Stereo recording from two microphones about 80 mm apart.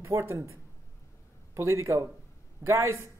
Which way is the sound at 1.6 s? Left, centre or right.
Right.